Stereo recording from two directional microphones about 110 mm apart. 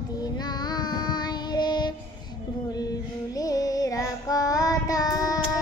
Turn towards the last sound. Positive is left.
turn(degrees=35)  # may be behind; listen again after turning